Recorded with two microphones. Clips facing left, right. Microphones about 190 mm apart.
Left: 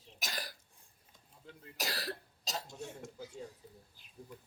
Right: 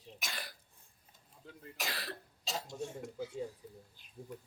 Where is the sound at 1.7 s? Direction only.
40° left (ahead or behind).